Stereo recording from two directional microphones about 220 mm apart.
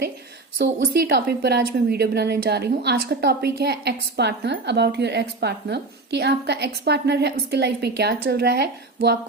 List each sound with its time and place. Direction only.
0.6 s a woman's voice: 50° right (ahead or behind)